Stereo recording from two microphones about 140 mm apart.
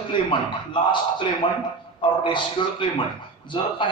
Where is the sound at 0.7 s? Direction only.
35° left (ahead or behind).